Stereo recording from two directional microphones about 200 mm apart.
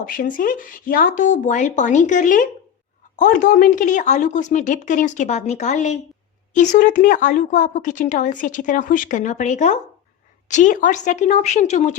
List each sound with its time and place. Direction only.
0.0 s speech: 45° left (ahead or behind)